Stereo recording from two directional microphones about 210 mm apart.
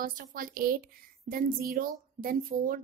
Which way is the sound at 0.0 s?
40° right (ahead or behind).